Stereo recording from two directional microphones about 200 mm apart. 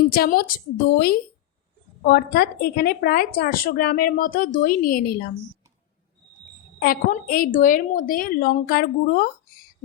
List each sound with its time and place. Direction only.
0.1 s a woman's voice: 45° left (ahead or behind)
6.7 s a woman's voice: 45° left (ahead or behind)